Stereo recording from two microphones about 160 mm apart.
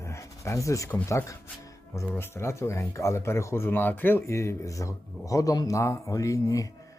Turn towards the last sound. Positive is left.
turn(degrees=20)  # may be behind; listen again after turning